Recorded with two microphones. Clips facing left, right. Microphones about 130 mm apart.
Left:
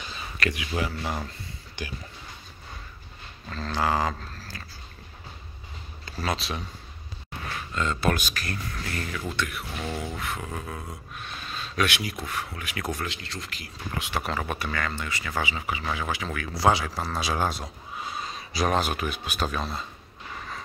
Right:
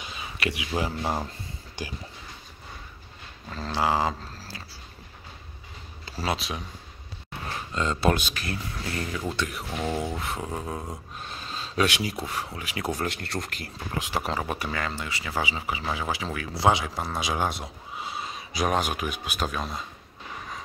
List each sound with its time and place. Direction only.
0.5 s speech: 30° right (ahead or behind)
3.4 s speech: 15° right (ahead or behind)
6.2 s speech: 5° right (ahead or behind)
7.5 s speech: 25° right (ahead or behind)
9.3 s speech: 30° right (ahead or behind)
9.8 s speech: 20° right (ahead or behind)
13.0 s speech: 55° right (ahead or behind)
14.2 s speech: 20° right (ahead or behind)